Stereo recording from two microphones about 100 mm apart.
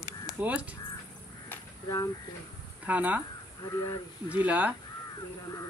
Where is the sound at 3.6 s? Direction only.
35° left (ahead or behind).